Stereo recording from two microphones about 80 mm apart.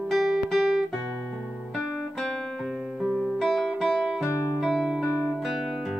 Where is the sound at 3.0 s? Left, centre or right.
Centre.